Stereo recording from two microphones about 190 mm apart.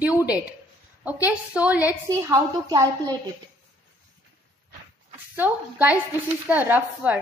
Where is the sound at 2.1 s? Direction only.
20° right (ahead or behind).